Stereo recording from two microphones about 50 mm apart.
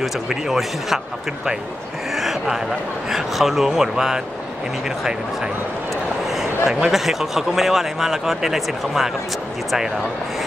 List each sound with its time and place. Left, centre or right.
0.0 s speech: centre
6.6 s speech: centre
6.9 s speech: centre